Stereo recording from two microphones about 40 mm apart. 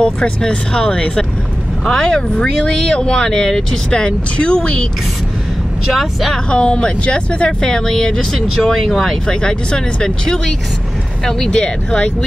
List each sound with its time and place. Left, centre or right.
0.0 s speech: left
5.9 s speech: centre
6.5 s speech: left
8.6 s speech: centre
9.3 s speech: left